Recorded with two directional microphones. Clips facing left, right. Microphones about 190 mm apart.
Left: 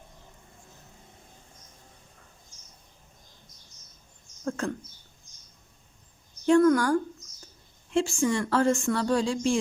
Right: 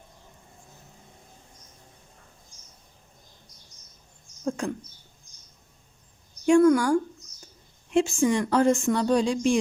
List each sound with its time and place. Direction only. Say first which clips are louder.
4.4 s speech: right 2 dB; 15° right (ahead or behind)
6.4 s speech: right 2 dB; 10° right (ahead or behind)